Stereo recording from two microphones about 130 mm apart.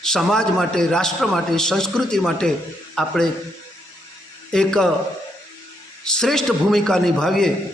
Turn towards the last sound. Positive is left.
turn(degrees=5)  # may be behind; listen again after turning